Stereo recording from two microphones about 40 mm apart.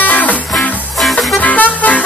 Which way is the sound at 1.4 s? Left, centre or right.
Left.